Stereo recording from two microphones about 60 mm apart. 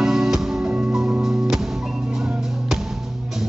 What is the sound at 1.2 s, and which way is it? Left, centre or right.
Music, centre.